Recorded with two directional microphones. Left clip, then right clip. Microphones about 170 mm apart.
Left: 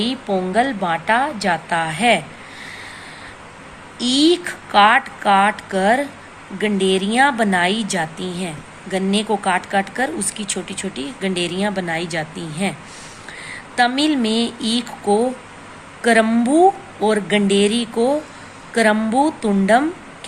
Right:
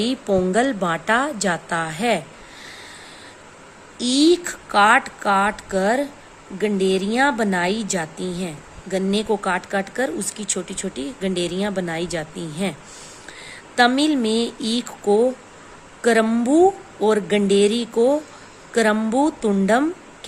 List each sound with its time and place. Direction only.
0.0 s a woman's voice: 70° right (ahead or behind); by 2.2 s 45° right (ahead or behind)
3.9 s a woman's voice: 50° right (ahead or behind)